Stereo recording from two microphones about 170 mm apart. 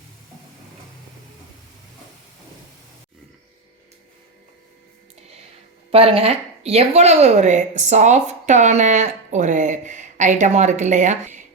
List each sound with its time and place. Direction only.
5.9 s a woman's voice: 35° right (ahead or behind)